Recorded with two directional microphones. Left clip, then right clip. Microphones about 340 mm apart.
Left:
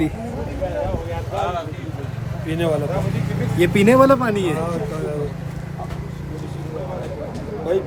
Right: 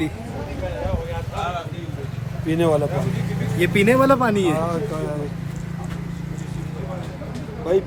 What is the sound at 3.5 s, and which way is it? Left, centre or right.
Speech, centre.